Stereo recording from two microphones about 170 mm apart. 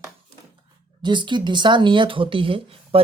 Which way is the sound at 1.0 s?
25° right (ahead or behind).